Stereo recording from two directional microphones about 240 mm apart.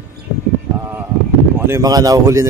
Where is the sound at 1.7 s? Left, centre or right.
Centre.